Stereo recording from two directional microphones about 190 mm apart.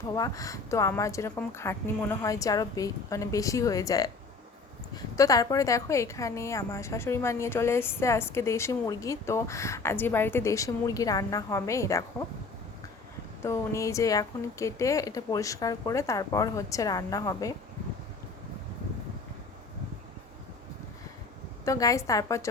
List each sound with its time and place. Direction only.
0.1 s a woman's voice: 20° left (ahead or behind)
13.4 s a woman's voice: 15° left (ahead or behind)
21.6 s a woman's voice: 15° left (ahead or behind)